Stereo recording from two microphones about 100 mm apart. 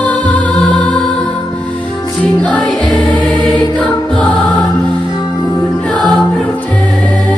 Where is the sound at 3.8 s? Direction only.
15° left (ahead or behind).